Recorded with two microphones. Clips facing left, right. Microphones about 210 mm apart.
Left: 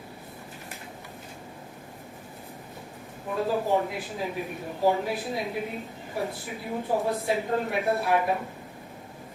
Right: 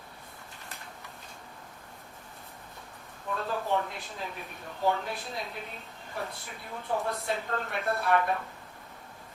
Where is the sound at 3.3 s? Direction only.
10° left (ahead or behind).